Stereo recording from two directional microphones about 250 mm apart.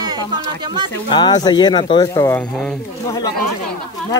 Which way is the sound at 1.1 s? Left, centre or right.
Centre.